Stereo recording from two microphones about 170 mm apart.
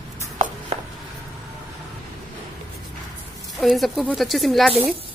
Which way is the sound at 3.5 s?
Centre (ahead or behind).